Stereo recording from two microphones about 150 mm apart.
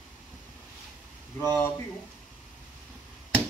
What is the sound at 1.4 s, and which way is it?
Speech, 15° left (ahead or behind).